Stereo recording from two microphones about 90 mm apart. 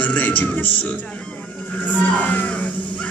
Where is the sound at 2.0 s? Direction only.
20° left (ahead or behind).